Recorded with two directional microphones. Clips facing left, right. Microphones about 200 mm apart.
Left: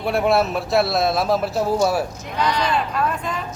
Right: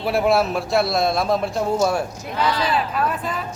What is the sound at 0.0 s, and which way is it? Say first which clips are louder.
Speech: even; centre (ahead or behind).